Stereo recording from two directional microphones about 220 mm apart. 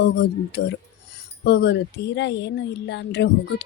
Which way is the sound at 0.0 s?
50° left (ahead or behind).